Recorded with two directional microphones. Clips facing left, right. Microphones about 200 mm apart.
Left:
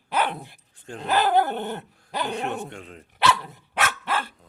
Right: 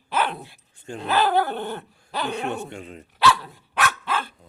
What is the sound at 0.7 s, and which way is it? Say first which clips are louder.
Speech: right 3 dB; centre (ahead or behind).